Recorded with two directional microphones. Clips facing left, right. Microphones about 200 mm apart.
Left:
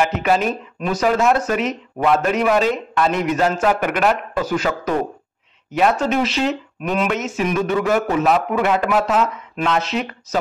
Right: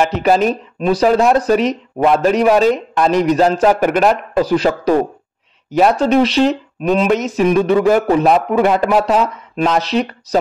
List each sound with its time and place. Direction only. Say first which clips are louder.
0.0 s speech: right 4 dB; 35° right (ahead or behind)